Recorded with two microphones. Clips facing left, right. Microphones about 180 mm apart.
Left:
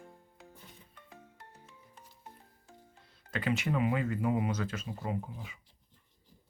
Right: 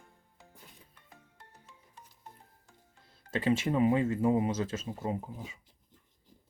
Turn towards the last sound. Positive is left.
turn(degrees=-25)  # may be behind; listen again after turning